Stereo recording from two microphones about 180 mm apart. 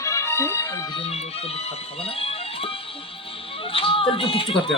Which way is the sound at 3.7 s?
30° left (ahead or behind).